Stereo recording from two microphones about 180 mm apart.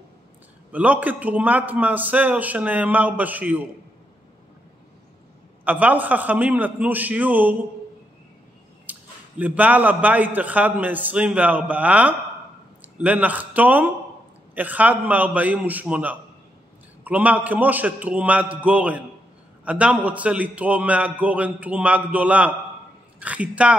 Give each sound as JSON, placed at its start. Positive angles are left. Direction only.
{"t": 0.7, "sound": "a man's voice", "side_deg": -10}
{"t": 5.7, "sound": "a man's voice", "side_deg": -10}
{"t": 8.9, "sound": "a sound", "side_deg": -10}
{"t": 9.4, "sound": "a man's voice", "side_deg": -10}